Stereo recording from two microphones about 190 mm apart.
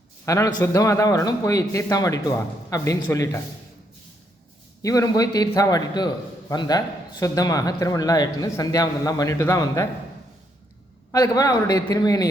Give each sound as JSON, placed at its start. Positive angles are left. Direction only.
{"t": 0.3, "sound": "a man's voice", "side_deg": 15}
{"t": 4.8, "sound": "speech", "side_deg": 20}
{"t": 11.1, "sound": "speech", "side_deg": 20}